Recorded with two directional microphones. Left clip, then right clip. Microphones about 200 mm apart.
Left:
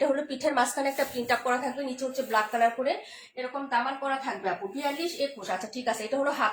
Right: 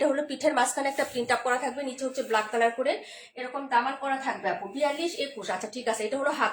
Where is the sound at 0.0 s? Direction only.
25° right (ahead or behind).